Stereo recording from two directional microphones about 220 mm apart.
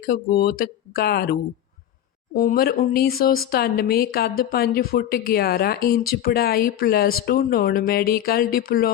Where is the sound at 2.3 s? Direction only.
40° left (ahead or behind).